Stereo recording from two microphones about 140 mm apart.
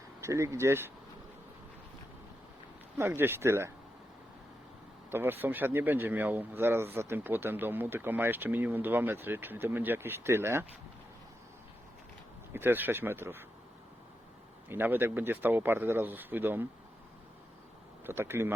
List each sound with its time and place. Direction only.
0.2 s speech: 20° right (ahead or behind)
3.0 s speech: 15° right (ahead or behind)
5.1 s speech: 15° right (ahead or behind)
12.5 s speech: 15° right (ahead or behind)
14.7 s speech: 15° right (ahead or behind)
18.0 s speech: 15° right (ahead or behind)